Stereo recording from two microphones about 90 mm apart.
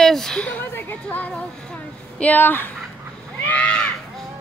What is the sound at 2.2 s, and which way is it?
Speech, 20° left (ahead or behind).